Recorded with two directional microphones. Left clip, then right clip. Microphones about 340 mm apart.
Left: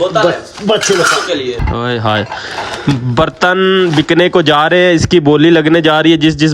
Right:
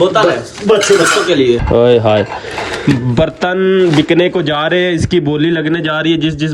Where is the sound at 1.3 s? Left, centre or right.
Centre.